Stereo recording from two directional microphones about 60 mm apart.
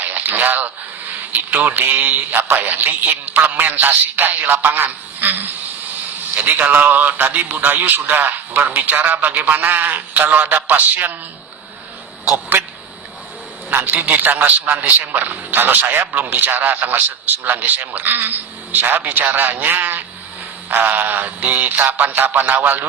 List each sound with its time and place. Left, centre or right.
0.0 s a sound: right
1.3 s a man's voice: right
13.7 s a man's voice: right